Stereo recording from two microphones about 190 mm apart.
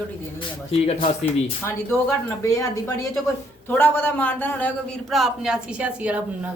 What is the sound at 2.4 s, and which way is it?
A man's voice, 15° left (ahead or behind).